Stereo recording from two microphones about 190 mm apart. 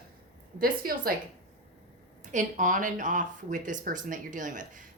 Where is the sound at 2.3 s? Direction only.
40° right (ahead or behind).